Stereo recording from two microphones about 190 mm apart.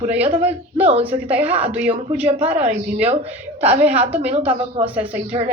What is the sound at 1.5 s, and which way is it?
A woman's voice, 10° right (ahead or behind).